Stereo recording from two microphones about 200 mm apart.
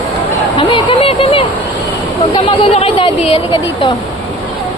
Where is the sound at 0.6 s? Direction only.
25° left (ahead or behind).